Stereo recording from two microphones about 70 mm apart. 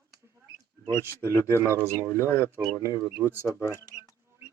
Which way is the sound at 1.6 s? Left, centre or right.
Right.